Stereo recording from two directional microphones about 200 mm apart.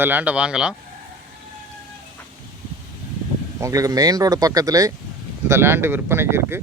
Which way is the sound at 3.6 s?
15° right (ahead or behind).